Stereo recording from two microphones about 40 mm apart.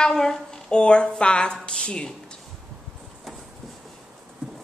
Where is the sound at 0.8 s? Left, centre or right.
Left.